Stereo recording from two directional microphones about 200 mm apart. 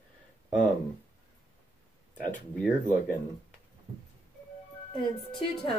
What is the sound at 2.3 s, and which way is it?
Speech, 5° left (ahead or behind).